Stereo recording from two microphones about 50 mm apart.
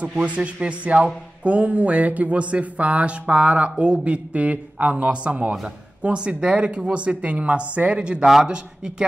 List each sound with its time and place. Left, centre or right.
0.2 s a man's voice: right